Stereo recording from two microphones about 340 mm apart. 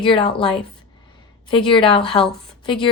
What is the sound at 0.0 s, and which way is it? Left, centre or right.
A woman's voice, centre.